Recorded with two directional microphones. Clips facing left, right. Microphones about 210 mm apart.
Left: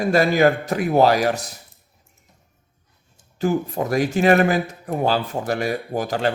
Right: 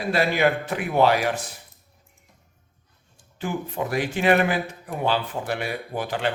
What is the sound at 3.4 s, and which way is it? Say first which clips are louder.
Speech: left 6 dB; 40° left (ahead or behind).